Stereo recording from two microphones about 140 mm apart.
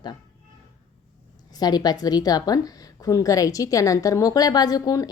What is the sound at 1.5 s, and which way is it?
A woman's voice, 30° left (ahead or behind).